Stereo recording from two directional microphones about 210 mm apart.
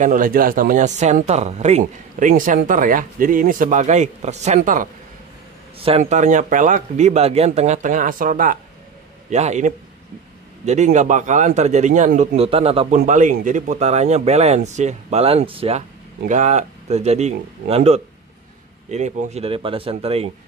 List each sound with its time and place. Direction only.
0.0 s a man's voice: 40° right (ahead or behind)
5.8 s a man's voice: 30° right (ahead or behind)